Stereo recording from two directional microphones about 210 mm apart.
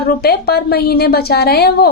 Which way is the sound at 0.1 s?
45° left (ahead or behind).